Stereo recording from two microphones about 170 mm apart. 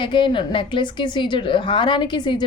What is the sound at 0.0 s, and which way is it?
A woman's voice, 30° left (ahead or behind).